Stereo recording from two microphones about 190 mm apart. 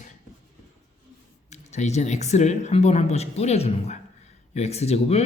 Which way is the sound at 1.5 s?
35° left (ahead or behind).